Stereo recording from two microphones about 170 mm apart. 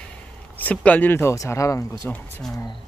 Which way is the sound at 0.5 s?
10° left (ahead or behind).